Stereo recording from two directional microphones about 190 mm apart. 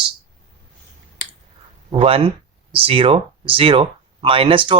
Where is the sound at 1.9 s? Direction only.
30° right (ahead or behind).